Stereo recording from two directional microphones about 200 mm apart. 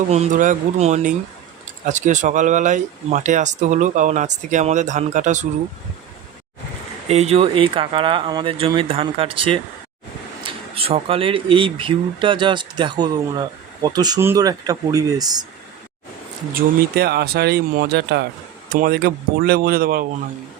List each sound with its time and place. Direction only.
0.1 s speech: 35° right (ahead or behind)
7.1 s speech: 30° right (ahead or behind)
10.8 s speech: 30° right (ahead or behind)
16.6 s speech: 50° right (ahead or behind)